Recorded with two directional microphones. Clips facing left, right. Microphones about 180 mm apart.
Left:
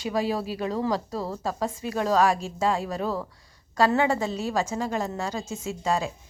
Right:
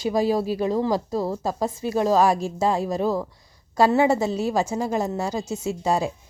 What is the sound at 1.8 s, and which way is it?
Speech, 30° right (ahead or behind).